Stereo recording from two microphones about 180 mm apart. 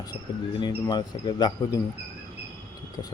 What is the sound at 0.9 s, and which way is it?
Speech, 25° left (ahead or behind).